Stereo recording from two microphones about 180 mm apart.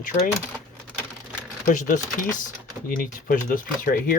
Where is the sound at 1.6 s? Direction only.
45° left (ahead or behind).